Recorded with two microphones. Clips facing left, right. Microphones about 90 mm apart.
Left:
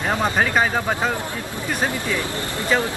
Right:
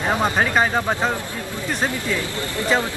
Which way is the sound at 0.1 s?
15° right (ahead or behind).